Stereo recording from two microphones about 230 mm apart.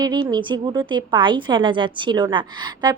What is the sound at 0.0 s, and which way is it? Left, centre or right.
A woman's voice, centre.